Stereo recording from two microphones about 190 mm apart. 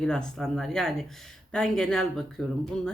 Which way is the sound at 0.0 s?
5° left (ahead or behind).